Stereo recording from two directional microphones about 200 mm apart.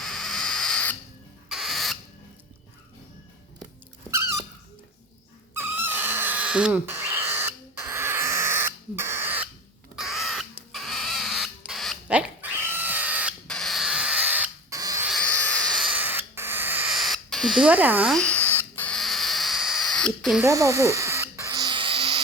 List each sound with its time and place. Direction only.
0.0 s rodents: centre (ahead or behind)
4.1 s a sound: 15° right (ahead or behind)
5.5 s a sound: 10° right (ahead or behind)
9.9 s crow: centre (ahead or behind)
13.5 s rodents: centre (ahead or behind); by 15.0 s 15° right (ahead or behind)
15.0 s owl: 5° left (ahead or behind)
15.9 s rodents: 10° right (ahead or behind)
18.2 s rodents: 10° left (ahead or behind)
20.4 s owl: 15° right (ahead or behind)